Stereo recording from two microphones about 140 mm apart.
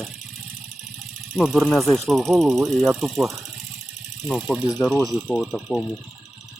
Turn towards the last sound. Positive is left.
turn(degrees=0)  # may be behind; listen again after turning